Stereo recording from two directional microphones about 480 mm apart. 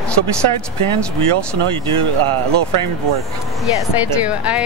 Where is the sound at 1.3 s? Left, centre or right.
Right.